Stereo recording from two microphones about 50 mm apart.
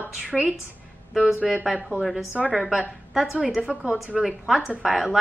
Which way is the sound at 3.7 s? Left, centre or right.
Right.